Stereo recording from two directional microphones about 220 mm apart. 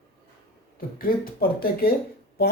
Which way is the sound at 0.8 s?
40° left (ahead or behind).